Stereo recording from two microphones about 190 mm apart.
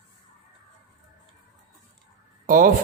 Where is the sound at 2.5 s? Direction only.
45° right (ahead or behind).